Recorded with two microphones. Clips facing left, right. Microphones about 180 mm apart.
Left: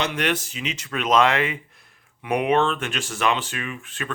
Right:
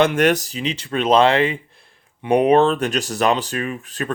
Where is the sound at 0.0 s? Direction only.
45° right (ahead or behind).